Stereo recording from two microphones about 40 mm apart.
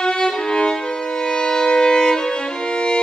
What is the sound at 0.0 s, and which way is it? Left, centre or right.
Violin, centre.